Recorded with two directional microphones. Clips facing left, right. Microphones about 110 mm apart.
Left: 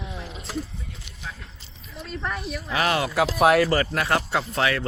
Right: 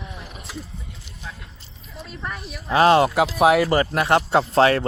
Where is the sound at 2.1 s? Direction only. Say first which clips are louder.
Left 4 dB; centre (ahead or behind).